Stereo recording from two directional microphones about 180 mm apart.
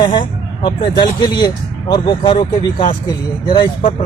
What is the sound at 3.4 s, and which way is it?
Speech, 25° left (ahead or behind).